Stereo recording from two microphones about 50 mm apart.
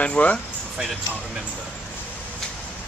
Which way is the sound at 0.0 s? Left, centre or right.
Left.